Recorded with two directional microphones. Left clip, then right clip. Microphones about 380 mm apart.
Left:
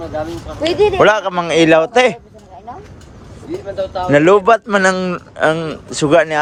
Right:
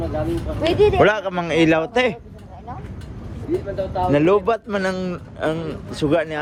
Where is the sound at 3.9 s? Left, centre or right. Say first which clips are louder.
Left 6 dB; centre.